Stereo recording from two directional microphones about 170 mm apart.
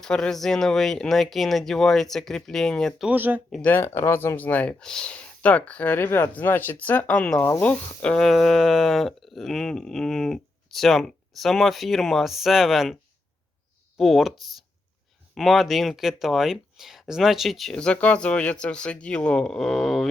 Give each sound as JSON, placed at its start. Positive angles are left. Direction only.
{"t": 0.0, "sound": "speech", "side_deg": 5}
{"t": 3.1, "sound": "speech", "side_deg": -10}
{"t": 3.5, "sound": "speech", "side_deg": 10}
{"t": 14.0, "sound": "speech", "side_deg": 0}